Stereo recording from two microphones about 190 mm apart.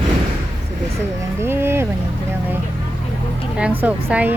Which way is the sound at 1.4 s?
10° right (ahead or behind).